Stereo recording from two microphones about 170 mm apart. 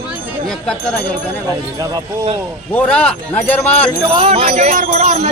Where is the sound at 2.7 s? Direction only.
5° left (ahead or behind).